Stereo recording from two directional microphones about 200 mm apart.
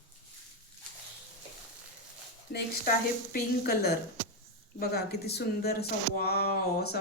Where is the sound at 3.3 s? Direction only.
45° left (ahead or behind).